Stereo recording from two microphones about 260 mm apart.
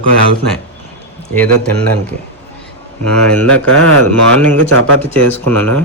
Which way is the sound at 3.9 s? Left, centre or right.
Right.